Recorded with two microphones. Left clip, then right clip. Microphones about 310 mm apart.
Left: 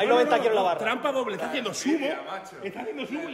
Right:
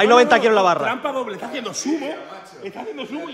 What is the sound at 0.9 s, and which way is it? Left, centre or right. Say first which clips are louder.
A man's voice: right 3 dB; centre.